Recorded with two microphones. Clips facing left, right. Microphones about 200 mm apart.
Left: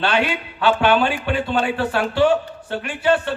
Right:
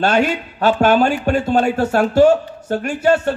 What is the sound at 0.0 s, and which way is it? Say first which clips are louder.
A man's voice: right 4 dB; 45° right (ahead or behind).